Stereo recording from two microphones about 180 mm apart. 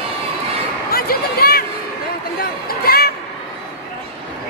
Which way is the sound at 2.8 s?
55° left (ahead or behind).